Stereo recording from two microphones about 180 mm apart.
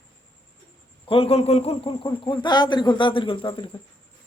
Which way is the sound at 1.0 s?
30° left (ahead or behind).